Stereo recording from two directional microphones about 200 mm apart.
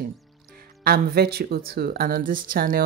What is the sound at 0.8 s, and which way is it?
Speech, 50° right (ahead or behind).